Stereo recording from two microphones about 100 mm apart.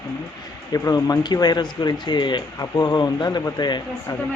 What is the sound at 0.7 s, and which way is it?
Speech, 35° left (ahead or behind).